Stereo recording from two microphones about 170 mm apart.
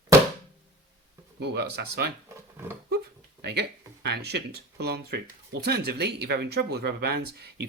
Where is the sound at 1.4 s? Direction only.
75° right (ahead or behind).